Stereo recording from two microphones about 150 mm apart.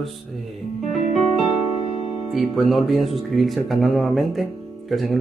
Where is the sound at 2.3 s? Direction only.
Centre (ahead or behind).